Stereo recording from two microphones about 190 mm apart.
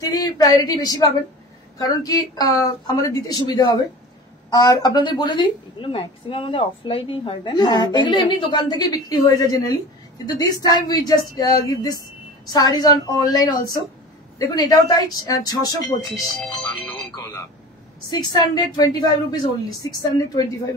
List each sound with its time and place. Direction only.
0.1 s a woman's voice: 20° left (ahead or behind)
16.1 s speech: centre (ahead or behind)
17.1 s a woman's voice: 15° left (ahead or behind)